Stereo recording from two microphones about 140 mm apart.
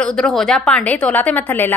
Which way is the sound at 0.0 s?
5° left (ahead or behind).